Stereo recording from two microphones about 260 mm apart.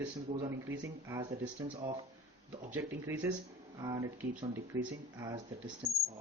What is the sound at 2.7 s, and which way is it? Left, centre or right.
Speech, centre.